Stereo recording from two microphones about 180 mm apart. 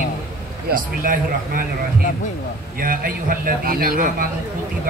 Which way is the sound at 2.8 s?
50° right (ahead or behind).